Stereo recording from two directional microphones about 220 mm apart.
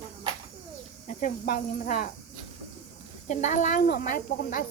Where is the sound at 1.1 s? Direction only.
40° left (ahead or behind).